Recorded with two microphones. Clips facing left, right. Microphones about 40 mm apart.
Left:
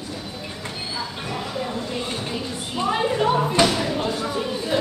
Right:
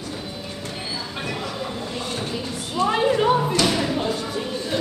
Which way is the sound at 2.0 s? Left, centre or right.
Left.